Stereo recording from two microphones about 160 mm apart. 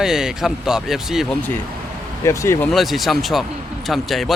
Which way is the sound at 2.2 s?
20° left (ahead or behind).